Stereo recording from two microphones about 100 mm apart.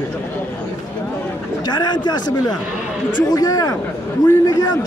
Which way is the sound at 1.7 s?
45° left (ahead or behind).